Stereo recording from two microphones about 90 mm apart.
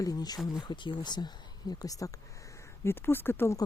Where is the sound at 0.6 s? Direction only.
60° left (ahead or behind); by 2.2 s 40° left (ahead or behind).